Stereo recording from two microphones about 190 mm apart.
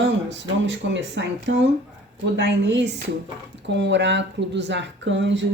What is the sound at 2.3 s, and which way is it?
Speech, 70° right (ahead or behind).